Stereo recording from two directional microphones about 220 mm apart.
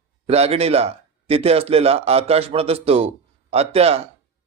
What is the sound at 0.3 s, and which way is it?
A man's voice, 30° right (ahead or behind).